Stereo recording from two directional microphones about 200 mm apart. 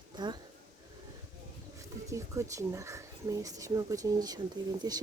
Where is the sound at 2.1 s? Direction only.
15° right (ahead or behind).